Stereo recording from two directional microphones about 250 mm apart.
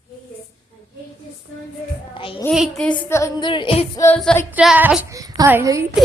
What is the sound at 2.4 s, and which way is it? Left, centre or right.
Child singing, centre.